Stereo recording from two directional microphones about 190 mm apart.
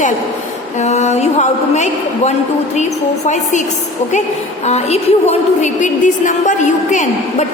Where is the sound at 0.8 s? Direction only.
35° left (ahead or behind).